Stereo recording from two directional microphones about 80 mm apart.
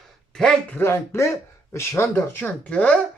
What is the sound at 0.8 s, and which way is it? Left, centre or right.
Speech, left.